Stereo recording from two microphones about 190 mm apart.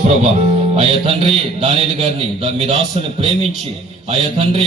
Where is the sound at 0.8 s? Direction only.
30° right (ahead or behind).